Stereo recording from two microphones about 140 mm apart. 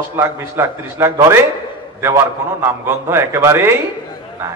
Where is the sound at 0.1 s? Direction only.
20° right (ahead or behind).